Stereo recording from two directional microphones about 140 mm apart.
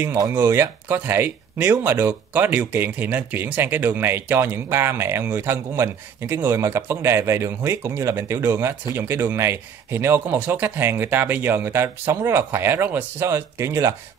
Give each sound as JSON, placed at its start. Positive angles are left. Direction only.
{"t": 0.0, "sound": "speech", "side_deg": -20}